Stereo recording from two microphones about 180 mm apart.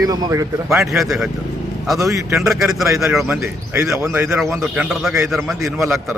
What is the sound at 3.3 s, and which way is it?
A man's voice, 15° right (ahead or behind).